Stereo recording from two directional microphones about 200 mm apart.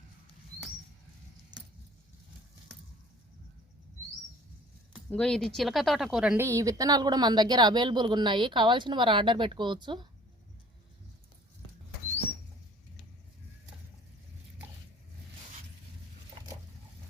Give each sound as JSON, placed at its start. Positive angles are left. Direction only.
{"t": 5.0, "sound": "speech", "side_deg": 5}